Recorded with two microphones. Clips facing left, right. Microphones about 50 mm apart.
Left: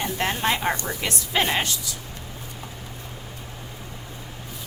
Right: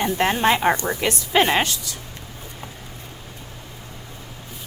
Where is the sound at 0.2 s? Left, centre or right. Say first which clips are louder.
Right 5 dB; right.